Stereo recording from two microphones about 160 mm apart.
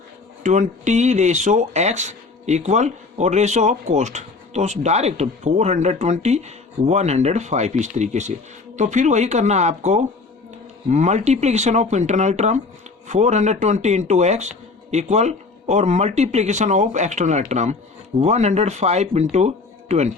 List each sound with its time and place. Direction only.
0.4 s speech: 50° right (ahead or behind)